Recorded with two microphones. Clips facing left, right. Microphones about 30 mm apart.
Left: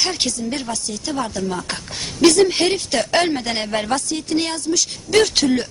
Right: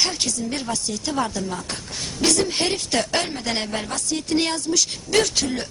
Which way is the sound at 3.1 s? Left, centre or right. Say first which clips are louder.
Left 7 dB; left.